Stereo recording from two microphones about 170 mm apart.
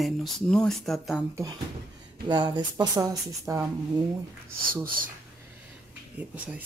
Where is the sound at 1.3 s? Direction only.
20° right (ahead or behind).